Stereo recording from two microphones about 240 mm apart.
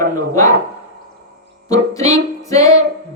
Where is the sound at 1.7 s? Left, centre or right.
Centre.